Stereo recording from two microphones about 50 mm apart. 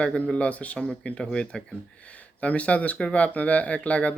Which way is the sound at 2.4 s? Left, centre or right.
Left.